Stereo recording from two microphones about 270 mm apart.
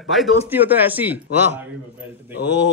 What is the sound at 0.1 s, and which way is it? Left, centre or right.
A man's voice, centre.